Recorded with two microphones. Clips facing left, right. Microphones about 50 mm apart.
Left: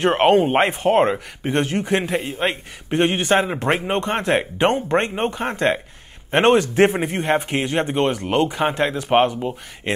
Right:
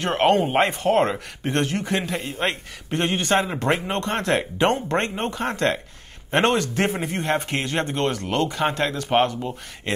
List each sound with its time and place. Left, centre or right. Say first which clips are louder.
0.0 s a man's voice: left 4 dB; centre
2.1 s a man's voice: left 5 dB; left
2.4 s a man's voice: left 2 dB; centre